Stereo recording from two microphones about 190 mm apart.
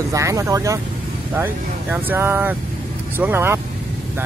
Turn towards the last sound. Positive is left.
turn(degrees=-10)  # may be behind; listen again after turning